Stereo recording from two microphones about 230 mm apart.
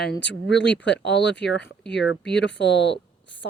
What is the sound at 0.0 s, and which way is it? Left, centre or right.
Speech, left.